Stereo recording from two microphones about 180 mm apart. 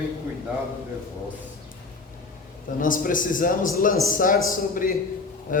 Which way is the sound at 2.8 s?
50° left (ahead or behind).